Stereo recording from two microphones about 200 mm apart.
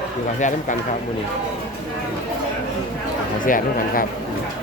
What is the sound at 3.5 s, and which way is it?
Speech, 45° left (ahead or behind).